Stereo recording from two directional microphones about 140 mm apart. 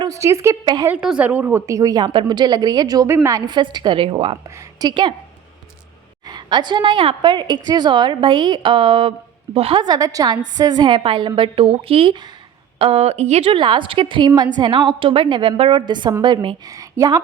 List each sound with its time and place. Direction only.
0.0 s a woman's voice: 20° right (ahead or behind)
0.9 s a woman's voice: 10° right (ahead or behind); by 4.4 s 40° right (ahead or behind)
4.4 s a woman's voice: 25° right (ahead or behind)
6.2 s a woman's voice: 30° right (ahead or behind)
9.8 s a woman's voice: 25° right (ahead or behind)
12.8 s a woman's voice: 45° right (ahead or behind)
16.6 s speech: 25° right (ahead or behind)